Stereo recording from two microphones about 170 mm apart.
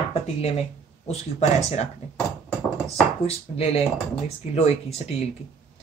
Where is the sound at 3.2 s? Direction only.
35° left (ahead or behind).